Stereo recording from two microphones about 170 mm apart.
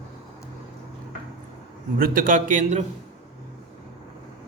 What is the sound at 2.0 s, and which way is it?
Speech, 50° right (ahead or behind).